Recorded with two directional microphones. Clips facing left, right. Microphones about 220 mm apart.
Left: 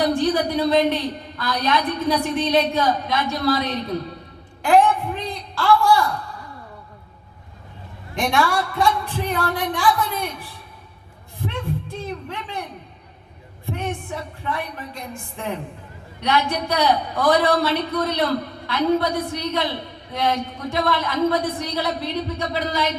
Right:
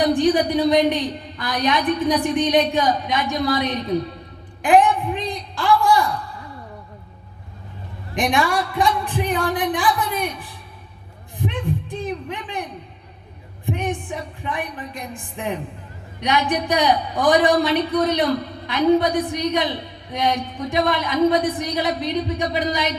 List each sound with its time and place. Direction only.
0.0 s a woman's voice: 15° right (ahead or behind)
4.6 s a sound: 15° right (ahead or behind)
8.1 s a woman's voice: 15° right (ahead or behind)
13.7 s a woman's voice: 15° right (ahead or behind)